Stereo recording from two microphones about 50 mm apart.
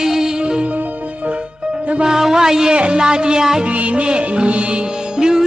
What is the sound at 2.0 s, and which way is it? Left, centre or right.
Music, centre.